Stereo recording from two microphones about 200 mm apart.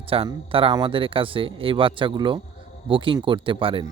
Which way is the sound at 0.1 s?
25° right (ahead or behind).